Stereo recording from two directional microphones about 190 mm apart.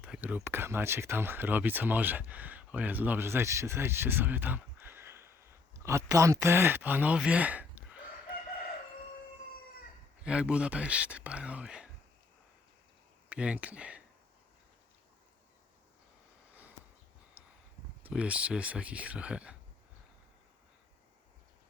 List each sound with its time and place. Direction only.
0.0 s speech: 5° right (ahead or behind)
10.2 s speech: 5° right (ahead or behind)
13.3 s speech: 5° right (ahead or behind)
17.4 s a sound: 10° right (ahead or behind)
18.0 s speech: 5° right (ahead or behind)